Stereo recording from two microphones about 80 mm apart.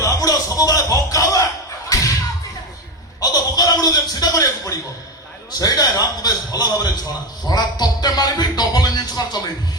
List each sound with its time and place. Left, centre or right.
0.0 s music: left
1.9 s thump: left
3.2 s a sound: left
7.4 s music: left